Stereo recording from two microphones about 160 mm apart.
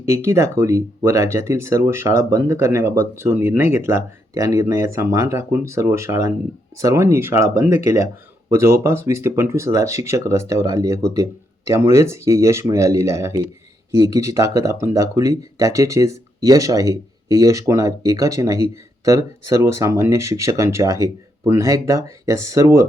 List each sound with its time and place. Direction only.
0.0 s speech: 20° right (ahead or behind)